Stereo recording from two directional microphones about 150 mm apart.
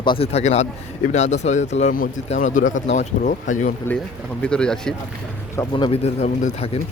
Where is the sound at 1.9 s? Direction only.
70° left (ahead or behind).